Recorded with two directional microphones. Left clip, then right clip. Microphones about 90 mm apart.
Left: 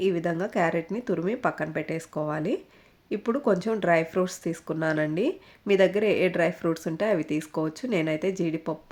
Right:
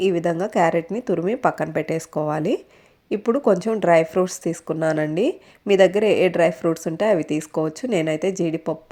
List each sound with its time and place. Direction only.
0.0 s speech: 40° right (ahead or behind)
3.1 s a woman's voice: 40° right (ahead or behind)